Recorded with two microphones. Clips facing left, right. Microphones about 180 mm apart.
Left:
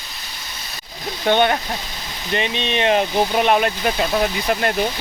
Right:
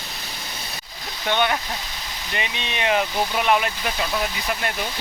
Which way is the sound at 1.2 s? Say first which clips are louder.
Left 6 dB; 40° left (ahead or behind).